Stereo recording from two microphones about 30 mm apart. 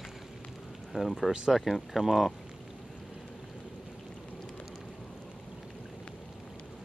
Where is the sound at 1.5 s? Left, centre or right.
Centre.